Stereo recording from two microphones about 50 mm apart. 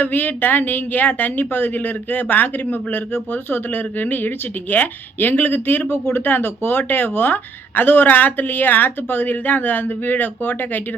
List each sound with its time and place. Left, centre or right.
0.0 s a woman's voice: left